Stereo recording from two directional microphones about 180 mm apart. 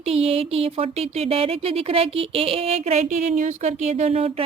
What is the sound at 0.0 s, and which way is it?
Speech, 35° right (ahead or behind).